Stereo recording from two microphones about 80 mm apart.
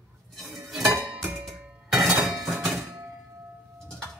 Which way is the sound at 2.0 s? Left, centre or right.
Centre.